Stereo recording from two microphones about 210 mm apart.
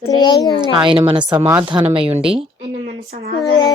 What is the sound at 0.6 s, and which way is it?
Speech, 20° right (ahead or behind).